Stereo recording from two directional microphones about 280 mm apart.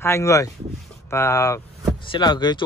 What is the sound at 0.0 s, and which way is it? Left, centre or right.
Speech, centre.